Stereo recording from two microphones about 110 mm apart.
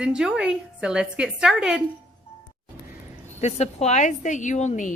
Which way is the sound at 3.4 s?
85° left.